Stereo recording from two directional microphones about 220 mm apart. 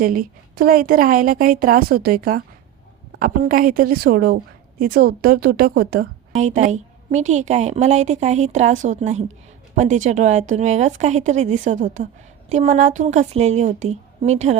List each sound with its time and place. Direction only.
0.0 s a woman's voice: 40° right (ahead or behind)